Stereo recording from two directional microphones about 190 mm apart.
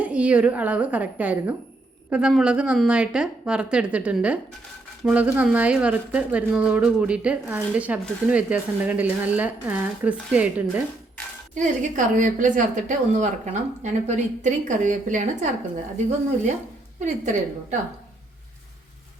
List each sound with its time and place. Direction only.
0.0 s a woman's voice: 5° right (ahead or behind)
11.5 s a woman's voice: 40° right (ahead or behind)
17.0 s a woman's voice: 40° right (ahead or behind)